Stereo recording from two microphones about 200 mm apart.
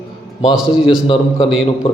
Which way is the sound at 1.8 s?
30° left (ahead or behind).